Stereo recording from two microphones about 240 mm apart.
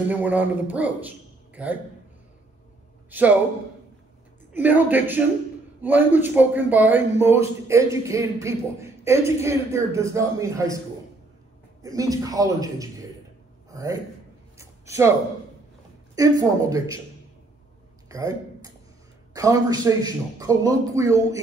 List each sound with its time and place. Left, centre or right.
0.1 s a man's voice: centre
3.1 s a man's voice: centre
4.6 s a man's voice: centre
11.8 s a man's voice: centre
13.7 s a sound: centre
16.2 s a man's voice: centre
18.0 s a sound: centre
19.3 s a man's voice: centre